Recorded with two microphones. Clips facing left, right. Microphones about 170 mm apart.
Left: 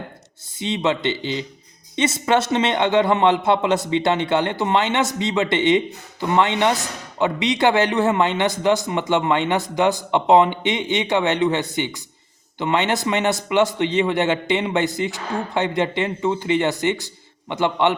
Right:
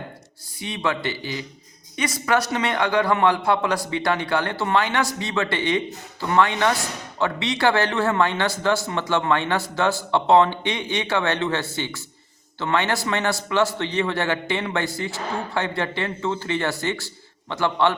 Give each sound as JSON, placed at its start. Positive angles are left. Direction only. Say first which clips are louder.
{"t": 0.5, "sound": "speech", "louder": "left 4 dB", "side_deg": 20}